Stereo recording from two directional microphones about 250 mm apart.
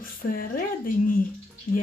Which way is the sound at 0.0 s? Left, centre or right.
Left.